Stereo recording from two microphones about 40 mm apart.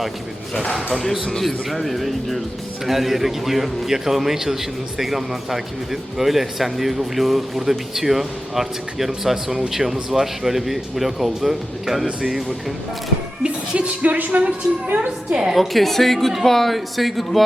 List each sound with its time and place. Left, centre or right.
0.9 s a man's voice: centre
13.4 s a woman's voice: right
15.3 s a woman's voice: right
15.5 s speech: centre